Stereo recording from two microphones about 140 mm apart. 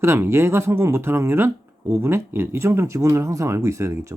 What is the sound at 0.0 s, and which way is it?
Speech, 20° right (ahead or behind).